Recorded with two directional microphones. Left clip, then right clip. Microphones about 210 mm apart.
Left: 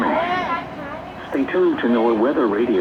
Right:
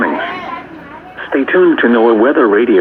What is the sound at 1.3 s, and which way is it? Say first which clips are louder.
Speech: right 9 dB; 30° right (ahead or behind).